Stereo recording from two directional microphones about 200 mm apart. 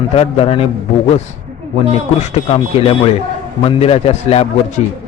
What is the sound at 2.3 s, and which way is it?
A man's voice, 30° left (ahead or behind).